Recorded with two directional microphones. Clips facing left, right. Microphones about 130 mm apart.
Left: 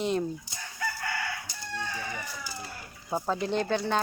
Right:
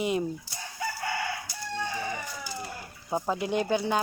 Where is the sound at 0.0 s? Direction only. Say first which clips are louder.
Even; 10° right (ahead or behind).